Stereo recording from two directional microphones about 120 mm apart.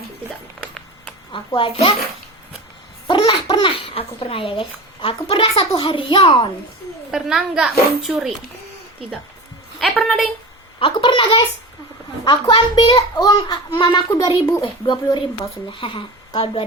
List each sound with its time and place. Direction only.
0.6 s a sound: 5° left (ahead or behind)
1.5 s speech: 50° left (ahead or behind)
3.5 s a child's voice: 50° left (ahead or behind)
7.1 s a child's voice: 5° right (ahead or behind)
9.9 s a child's voice: centre (ahead or behind)
10.8 s a sound: 45° left (ahead or behind)
12.2 s a child's voice: 40° left (ahead or behind)
14.6 s speech: 40° left (ahead or behind)